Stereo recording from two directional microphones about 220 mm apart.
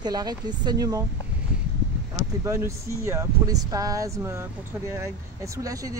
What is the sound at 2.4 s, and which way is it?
Speech, 15° right (ahead or behind).